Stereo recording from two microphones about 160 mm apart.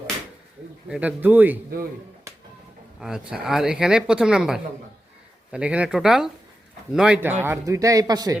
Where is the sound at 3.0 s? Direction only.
5° right (ahead or behind); by 8.3 s 25° right (ahead or behind).